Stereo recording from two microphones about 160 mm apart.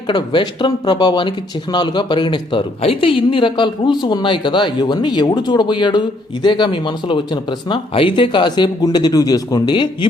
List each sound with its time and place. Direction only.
0.1 s speech: 30° left (ahead or behind)